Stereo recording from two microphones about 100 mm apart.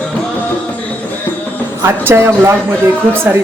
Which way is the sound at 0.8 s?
15° left (ahead or behind).